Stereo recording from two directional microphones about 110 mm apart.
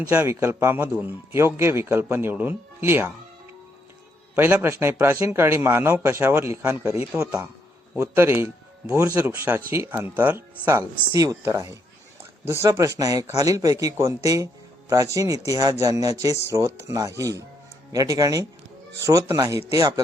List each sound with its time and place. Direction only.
0.1 s speech: 15° right (ahead or behind)
4.4 s speech: 20° right (ahead or behind)
7.3 s speech: 10° right (ahead or behind)
8.0 s speech: 25° right (ahead or behind)